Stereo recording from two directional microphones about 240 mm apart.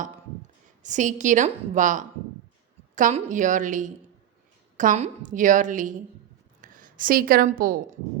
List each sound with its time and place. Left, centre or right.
0.8 s a woman's voice: right